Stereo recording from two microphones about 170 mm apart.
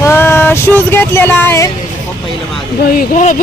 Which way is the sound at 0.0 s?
15° left (ahead or behind).